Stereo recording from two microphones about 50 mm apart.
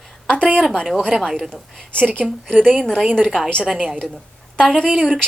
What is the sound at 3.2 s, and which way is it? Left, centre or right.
Speech, centre.